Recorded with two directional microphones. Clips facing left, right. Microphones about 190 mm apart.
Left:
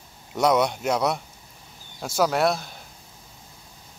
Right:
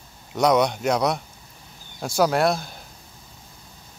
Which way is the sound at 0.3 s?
5° left (ahead or behind).